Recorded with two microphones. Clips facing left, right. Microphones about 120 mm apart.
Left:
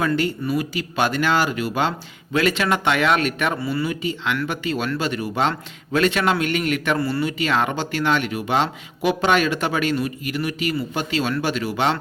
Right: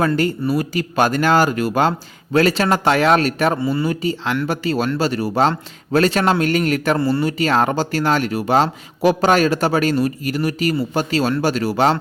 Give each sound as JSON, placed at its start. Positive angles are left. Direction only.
{"t": 0.0, "sound": "speech", "side_deg": -40}